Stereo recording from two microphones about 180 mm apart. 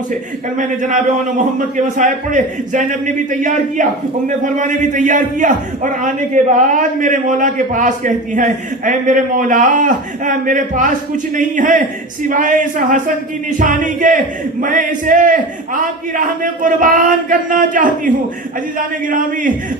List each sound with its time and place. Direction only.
0.1 s a man's voice: 45° right (ahead or behind)